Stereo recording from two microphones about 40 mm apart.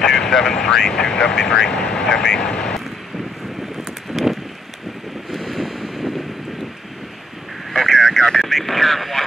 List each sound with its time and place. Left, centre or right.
0.0 s speech: centre
2.6 s vehicle: centre
4.1 s a sound: centre
5.3 s boat: centre
7.7 s vehicle: centre